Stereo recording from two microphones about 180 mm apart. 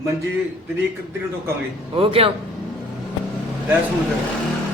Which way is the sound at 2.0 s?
30° right (ahead or behind).